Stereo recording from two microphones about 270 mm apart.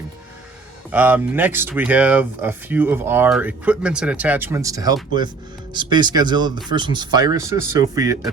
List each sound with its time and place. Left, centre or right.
0.9 s speech: centre